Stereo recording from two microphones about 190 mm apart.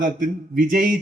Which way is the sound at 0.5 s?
45° right (ahead or behind).